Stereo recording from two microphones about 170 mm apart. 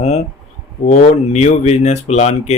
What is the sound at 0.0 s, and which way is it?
Speech, 40° left (ahead or behind).